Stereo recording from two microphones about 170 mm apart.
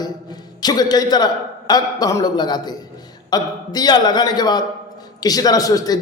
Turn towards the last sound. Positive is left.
turn(degrees=20)  # may be behind; listen again after turning